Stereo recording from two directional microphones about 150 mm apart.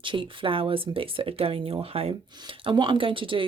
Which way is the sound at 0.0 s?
35° right (ahead or behind).